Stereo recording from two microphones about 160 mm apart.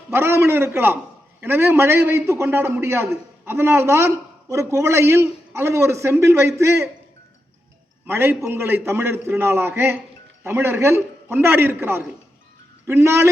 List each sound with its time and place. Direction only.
0.1 s a man's voice: 15° right (ahead or behind)
8.0 s a man's voice: 15° right (ahead or behind)